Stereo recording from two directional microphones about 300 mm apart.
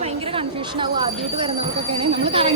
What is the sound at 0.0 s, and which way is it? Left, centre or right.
Speech, centre.